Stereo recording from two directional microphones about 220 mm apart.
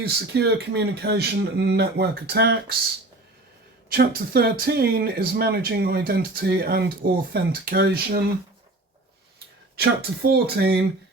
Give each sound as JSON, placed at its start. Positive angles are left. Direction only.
{"t": 0.0, "sound": "speech", "side_deg": -50}
{"t": 3.9, "sound": "speech", "side_deg": -45}
{"t": 9.7, "sound": "speech", "side_deg": -45}